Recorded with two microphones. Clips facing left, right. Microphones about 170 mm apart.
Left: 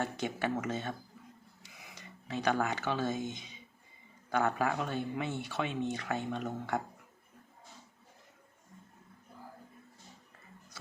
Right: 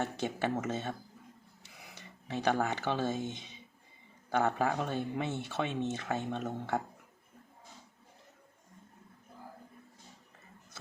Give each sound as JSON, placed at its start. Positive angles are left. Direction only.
{"t": 0.0, "sound": "speech", "side_deg": -25}